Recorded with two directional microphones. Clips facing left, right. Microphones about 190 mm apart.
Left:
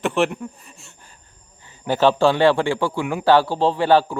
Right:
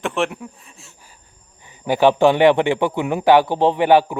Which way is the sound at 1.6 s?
15° right (ahead or behind).